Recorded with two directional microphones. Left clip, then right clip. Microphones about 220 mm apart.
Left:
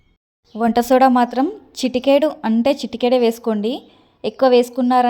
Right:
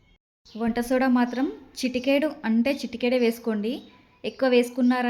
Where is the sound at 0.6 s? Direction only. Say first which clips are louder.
Left 11 dB; 35° left (ahead or behind).